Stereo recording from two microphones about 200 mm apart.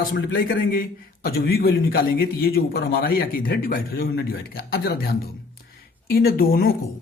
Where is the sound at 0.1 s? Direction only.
65° left (ahead or behind); by 6.7 s 45° left (ahead or behind).